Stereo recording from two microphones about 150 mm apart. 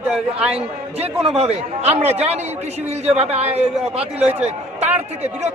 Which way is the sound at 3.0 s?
45° right (ahead or behind).